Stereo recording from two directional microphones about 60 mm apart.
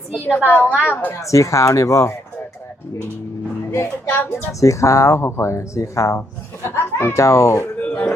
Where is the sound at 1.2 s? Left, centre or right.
Left.